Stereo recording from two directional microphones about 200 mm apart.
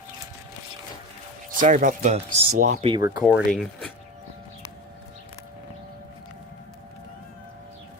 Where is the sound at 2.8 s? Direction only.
20° right (ahead or behind).